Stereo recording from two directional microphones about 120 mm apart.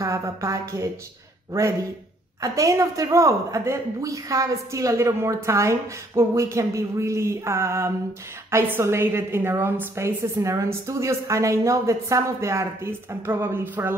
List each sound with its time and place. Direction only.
0.0 s a woman's voice: 25° right (ahead or behind)